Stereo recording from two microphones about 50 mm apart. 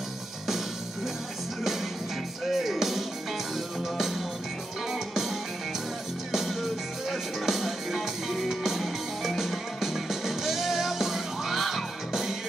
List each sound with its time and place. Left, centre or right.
2.4 s music: centre
4.9 s music: centre